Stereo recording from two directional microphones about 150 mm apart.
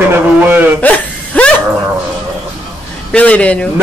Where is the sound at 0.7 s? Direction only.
10° left (ahead or behind).